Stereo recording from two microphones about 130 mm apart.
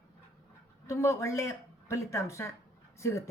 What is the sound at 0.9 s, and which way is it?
Speech, 25° left (ahead or behind).